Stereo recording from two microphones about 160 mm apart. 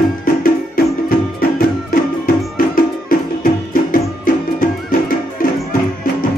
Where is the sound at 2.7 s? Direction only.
65° left (ahead or behind).